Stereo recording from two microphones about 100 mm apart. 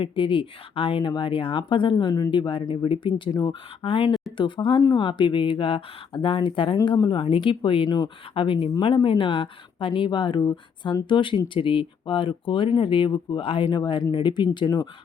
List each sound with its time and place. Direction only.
0.0 s speech: 55° left (ahead or behind)
6.8 s speech: 50° left (ahead or behind)
7.9 s speech: 45° left (ahead or behind)
8.4 s speech: 65° left (ahead or behind)
13.7 s speech: 45° left (ahead or behind)